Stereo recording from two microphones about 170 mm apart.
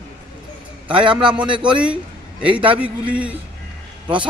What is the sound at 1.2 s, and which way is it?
Speech, 5° right (ahead or behind).